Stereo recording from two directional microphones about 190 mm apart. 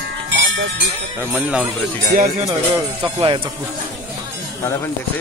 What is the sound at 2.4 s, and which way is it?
Speech, 20° right (ahead or behind).